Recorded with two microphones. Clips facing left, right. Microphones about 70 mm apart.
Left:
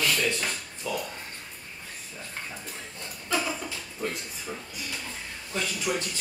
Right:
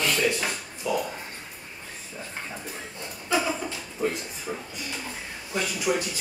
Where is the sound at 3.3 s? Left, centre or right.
Centre.